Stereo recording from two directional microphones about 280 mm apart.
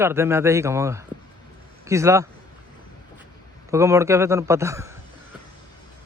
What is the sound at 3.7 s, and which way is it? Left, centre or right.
Speech, centre.